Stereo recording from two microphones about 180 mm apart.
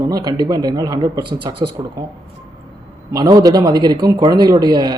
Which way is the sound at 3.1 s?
20° right (ahead or behind).